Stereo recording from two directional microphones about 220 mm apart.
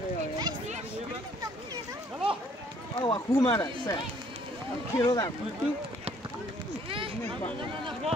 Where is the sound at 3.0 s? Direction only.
20° left (ahead or behind).